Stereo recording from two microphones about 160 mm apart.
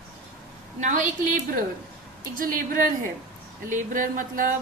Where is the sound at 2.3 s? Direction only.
60° right (ahead or behind).